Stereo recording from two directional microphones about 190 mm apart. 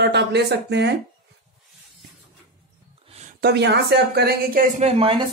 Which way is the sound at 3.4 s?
60° right (ahead or behind).